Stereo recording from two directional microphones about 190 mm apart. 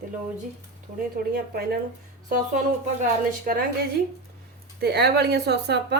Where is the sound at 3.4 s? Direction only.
50° right (ahead or behind).